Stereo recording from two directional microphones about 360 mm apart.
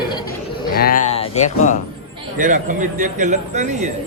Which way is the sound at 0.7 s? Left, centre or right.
Left.